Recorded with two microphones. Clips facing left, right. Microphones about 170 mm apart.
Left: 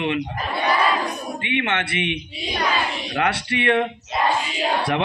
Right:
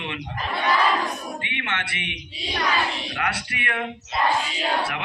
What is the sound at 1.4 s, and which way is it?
A man's voice, 20° left (ahead or behind).